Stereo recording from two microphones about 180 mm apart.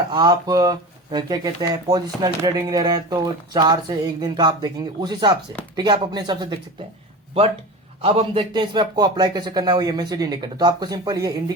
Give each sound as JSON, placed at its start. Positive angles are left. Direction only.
{"t": 0.1, "sound": "speech", "side_deg": -25}
{"t": 8.0, "sound": "speech", "side_deg": -30}